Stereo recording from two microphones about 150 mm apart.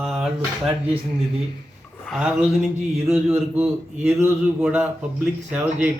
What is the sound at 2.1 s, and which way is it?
A man's voice, centre (ahead or behind).